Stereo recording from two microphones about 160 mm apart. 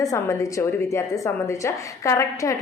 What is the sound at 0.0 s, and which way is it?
A woman's voice, 20° left (ahead or behind).